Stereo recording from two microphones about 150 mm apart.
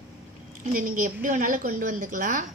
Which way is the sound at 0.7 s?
65° right (ahead or behind).